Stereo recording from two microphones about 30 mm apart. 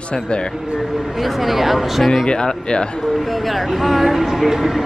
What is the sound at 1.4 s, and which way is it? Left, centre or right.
Speech, centre.